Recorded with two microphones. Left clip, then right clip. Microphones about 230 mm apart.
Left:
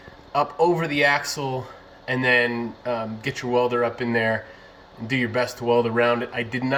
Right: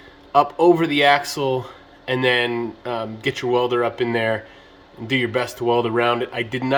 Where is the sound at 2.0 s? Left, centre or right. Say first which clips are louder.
Right 1 dB; right.